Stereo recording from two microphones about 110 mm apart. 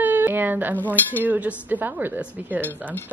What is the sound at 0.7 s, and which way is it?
Cutlery, 15° left (ahead or behind).